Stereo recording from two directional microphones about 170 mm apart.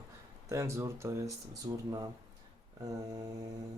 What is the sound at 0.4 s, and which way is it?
Speech, 15° right (ahead or behind).